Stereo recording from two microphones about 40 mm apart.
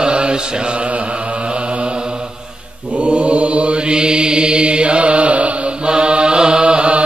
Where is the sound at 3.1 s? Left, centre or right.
Right.